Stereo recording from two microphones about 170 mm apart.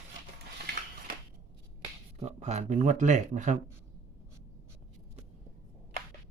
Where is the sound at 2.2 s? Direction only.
40° right (ahead or behind).